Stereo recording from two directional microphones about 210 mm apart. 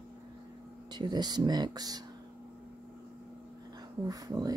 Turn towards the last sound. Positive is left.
turn(degrees=-15)  # may be behind; listen again after turning